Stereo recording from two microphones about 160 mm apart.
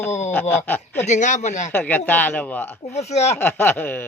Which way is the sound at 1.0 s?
50° left (ahead or behind).